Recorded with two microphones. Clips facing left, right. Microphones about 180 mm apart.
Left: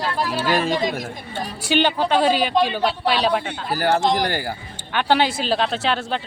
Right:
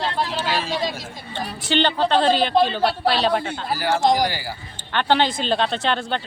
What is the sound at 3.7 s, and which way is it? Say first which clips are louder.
Speech: even; 55° left (ahead or behind).